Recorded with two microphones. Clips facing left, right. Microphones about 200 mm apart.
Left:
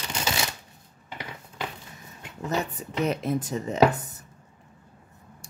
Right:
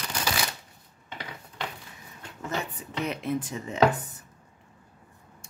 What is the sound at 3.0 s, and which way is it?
Speech, 40° left (ahead or behind).